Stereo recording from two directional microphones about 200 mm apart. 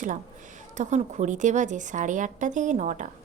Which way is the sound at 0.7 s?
35° right (ahead or behind).